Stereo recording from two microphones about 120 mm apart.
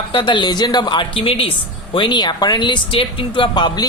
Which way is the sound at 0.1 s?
45° left (ahead or behind).